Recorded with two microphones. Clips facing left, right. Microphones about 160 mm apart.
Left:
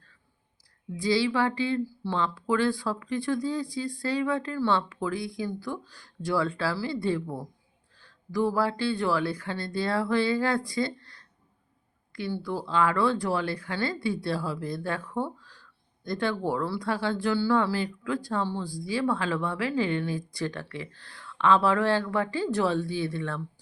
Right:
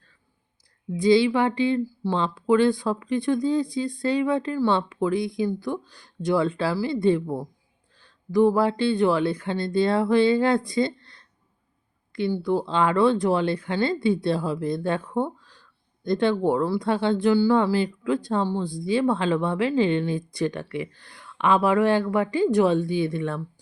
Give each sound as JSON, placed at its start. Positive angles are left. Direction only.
{"t": 0.9, "sound": "a woman's voice", "side_deg": -20}